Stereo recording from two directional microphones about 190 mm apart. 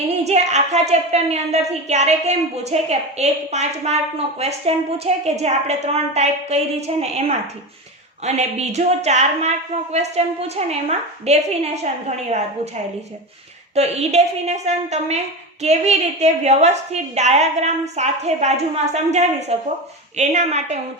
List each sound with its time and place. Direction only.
0.3 s a woman's voice: 35° right (ahead or behind)
13.7 s a woman's voice: 35° right (ahead or behind)